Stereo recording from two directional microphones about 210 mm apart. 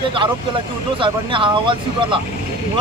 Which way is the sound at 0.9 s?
25° right (ahead or behind).